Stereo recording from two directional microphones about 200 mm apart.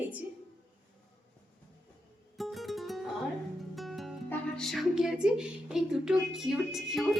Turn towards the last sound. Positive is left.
turn(degrees=0)  # may be behind; listen again after turning